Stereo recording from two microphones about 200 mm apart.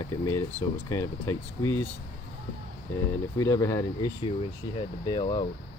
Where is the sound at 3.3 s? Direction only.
15° left (ahead or behind).